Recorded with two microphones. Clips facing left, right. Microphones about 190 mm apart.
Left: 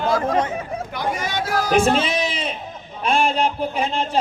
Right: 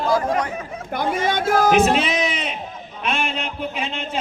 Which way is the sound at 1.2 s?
50° right (ahead or behind).